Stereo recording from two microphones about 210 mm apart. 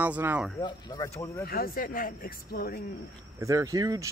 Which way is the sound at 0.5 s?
20° left (ahead or behind).